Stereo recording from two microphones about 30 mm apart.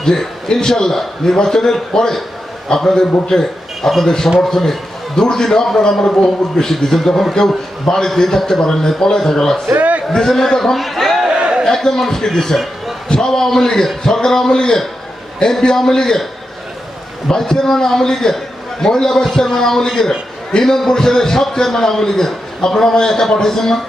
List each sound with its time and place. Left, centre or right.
0.0 s a man's voice: centre
6.6 s a man's voice: centre
9.7 s a sound: right
10.2 s a man's voice: centre
11.3 s a sound: right
11.6 s a man's voice: centre
17.2 s a man's voice: left